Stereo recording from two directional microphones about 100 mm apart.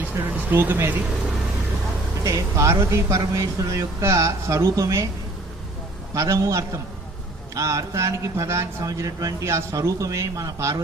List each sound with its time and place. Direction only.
0.0 s a sound: 20° right (ahead or behind)
2.2 s speech: 30° right (ahead or behind)
6.1 s speech: 30° right (ahead or behind)